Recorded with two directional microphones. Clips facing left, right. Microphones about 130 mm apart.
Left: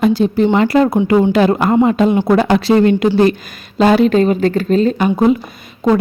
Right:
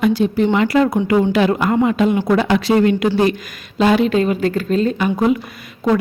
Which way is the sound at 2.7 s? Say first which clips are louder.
Left 3 dB; 35° left (ahead or behind).